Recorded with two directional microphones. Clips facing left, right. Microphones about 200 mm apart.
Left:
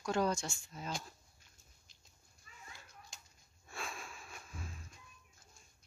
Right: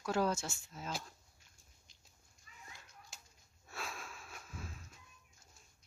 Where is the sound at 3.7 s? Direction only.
Centre (ahead or behind).